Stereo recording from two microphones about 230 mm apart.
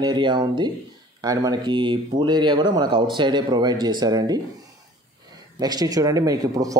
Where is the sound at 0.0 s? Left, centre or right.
Centre.